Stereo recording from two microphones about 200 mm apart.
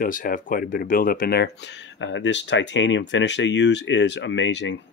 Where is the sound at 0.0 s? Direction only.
45° left (ahead or behind).